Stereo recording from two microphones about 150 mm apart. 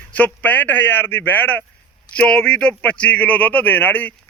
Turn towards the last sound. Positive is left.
turn(degrees=10)  # may be behind; listen again after turning